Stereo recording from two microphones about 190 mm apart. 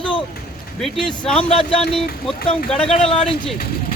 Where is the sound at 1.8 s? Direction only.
Centre (ahead or behind).